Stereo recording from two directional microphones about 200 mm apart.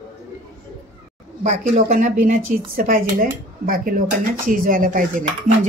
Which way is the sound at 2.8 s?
45° right (ahead or behind).